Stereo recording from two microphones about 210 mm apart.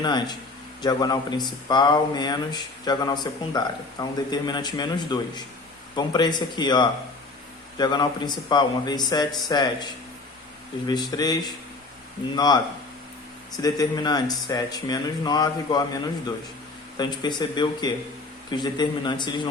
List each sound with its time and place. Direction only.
0.0 s speech: 20° left (ahead or behind)
13.6 s speech: 15° left (ahead or behind)